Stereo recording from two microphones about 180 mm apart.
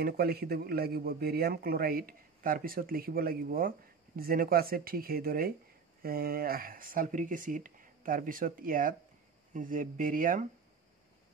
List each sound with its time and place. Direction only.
0.0 s speech: 55° right (ahead or behind)